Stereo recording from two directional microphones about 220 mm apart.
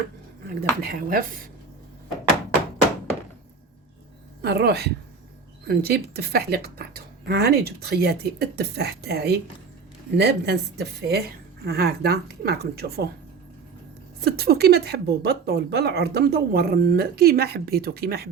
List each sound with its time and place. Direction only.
0.6 s a woman's voice: 45° right (ahead or behind)
4.4 s a woman's voice: 45° right (ahead or behind)
14.2 s a woman's voice: 45° right (ahead or behind)